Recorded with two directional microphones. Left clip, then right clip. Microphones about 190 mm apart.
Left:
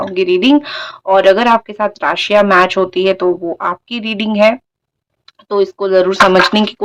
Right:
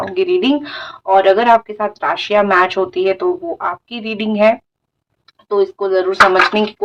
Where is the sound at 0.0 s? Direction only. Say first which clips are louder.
Left 2 dB; 35° left (ahead or behind).